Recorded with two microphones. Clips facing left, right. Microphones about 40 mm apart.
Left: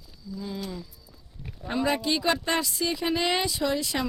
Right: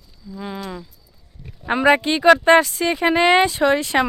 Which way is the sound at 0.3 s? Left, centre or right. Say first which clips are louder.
Right 5 dB; right.